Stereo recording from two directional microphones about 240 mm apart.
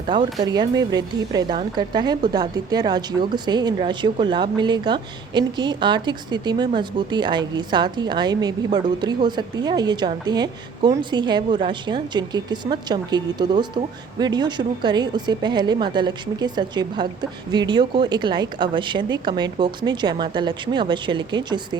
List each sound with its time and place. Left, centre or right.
0.1 s a woman's voice: centre